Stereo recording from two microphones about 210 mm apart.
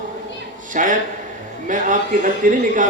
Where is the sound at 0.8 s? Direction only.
35° right (ahead or behind).